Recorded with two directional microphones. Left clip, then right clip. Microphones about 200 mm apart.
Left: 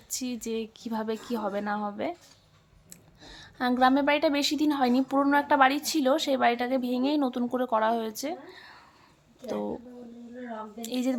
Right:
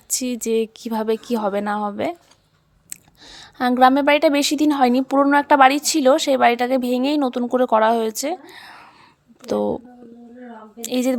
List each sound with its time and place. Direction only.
0.1 s a woman's voice: 40° right (ahead or behind)